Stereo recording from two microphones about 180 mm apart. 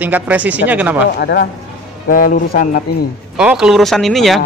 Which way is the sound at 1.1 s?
65° left (ahead or behind).